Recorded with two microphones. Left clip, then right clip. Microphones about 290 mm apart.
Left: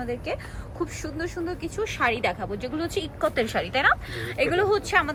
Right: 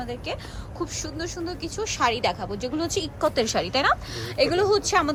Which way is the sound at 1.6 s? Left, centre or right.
Right.